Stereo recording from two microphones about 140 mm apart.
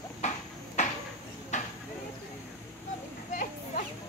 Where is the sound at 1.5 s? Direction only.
60° left (ahead or behind).